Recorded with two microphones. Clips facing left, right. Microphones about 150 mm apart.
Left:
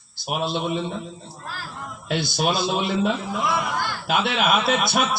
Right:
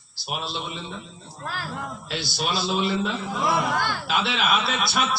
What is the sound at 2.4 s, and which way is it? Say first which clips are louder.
A man's voice: left 1 dB; 50° left (ahead or behind).